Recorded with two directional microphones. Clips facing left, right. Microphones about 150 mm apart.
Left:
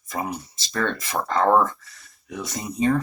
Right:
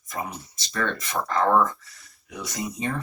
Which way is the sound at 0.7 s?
30° left (ahead or behind).